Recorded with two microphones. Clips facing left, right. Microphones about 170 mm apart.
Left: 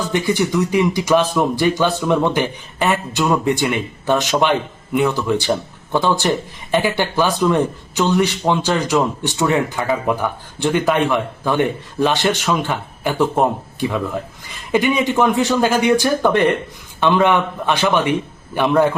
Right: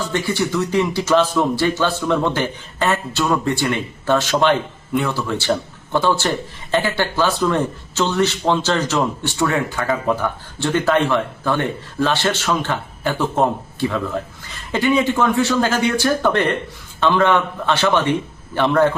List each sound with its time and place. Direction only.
0.1 s speech: 15° left (ahead or behind)